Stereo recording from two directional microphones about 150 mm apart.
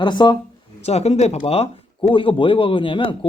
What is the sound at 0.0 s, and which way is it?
Speech, 30° left (ahead or behind).